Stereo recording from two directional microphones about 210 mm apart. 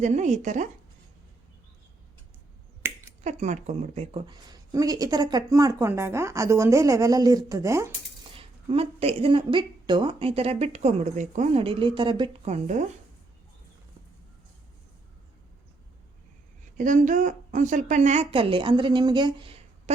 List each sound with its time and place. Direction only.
0.0 s speech: 35° right (ahead or behind)
2.8 s finger snapping: 10° right (ahead or behind)
3.2 s speech: 35° right (ahead or behind); by 7.9 s 15° right (ahead or behind)
8.3 s a woman's voice: 25° right (ahead or behind)
12.6 s speech: 35° right (ahead or behind)
16.7 s a woman's voice: 40° right (ahead or behind)